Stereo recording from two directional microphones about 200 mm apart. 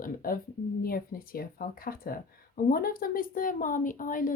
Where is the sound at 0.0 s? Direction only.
45° left (ahead or behind).